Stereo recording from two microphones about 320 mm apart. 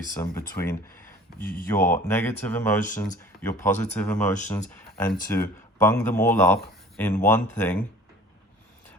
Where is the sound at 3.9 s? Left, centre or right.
Centre.